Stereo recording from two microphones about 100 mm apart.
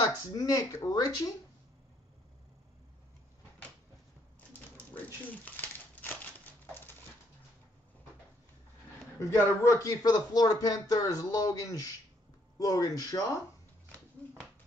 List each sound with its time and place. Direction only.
0.0 s speech: 40° left (ahead or behind)
9.2 s speech: 30° left (ahead or behind)
13.9 s a sound: 10° left (ahead or behind)